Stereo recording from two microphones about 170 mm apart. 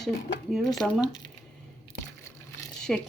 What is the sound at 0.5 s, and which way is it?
Speech, centre (ahead or behind).